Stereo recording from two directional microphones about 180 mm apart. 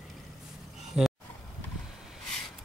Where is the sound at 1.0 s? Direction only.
5° right (ahead or behind).